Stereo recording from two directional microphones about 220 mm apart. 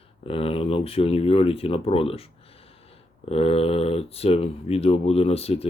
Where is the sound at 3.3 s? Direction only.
25° left (ahead or behind).